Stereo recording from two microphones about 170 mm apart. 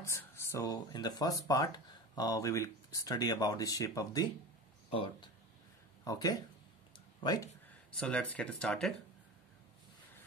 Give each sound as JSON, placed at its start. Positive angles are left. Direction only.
{"t": 0.0, "sound": "speech", "side_deg": 15}
{"t": 4.9, "sound": "speech", "side_deg": 30}
{"t": 7.9, "sound": "speech", "side_deg": 5}